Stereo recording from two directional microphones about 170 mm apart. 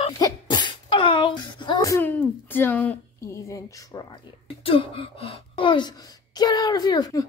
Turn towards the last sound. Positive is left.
turn(degrees=25)  # may be behind; listen again after turning